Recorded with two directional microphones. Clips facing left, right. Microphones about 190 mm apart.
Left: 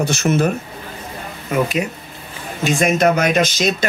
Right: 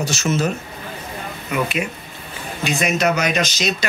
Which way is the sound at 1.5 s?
40° left (ahead or behind).